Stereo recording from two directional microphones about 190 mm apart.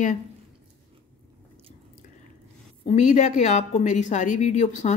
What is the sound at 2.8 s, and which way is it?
Speech, 40° left (ahead or behind).